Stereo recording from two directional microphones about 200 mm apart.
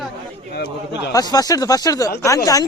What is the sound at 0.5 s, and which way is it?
Speech, 55° left (ahead or behind).